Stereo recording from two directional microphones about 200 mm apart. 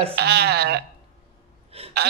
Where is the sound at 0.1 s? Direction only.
55° right (ahead or behind).